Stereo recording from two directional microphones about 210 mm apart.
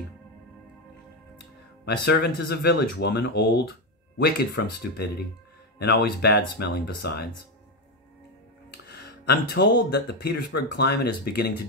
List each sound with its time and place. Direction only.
1.9 s speech: 50° left (ahead or behind)
4.9 s speech: 50° left (ahead or behind)
8.8 s speech: 50° left (ahead or behind)